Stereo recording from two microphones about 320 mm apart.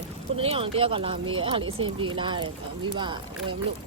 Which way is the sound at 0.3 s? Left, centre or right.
Centre.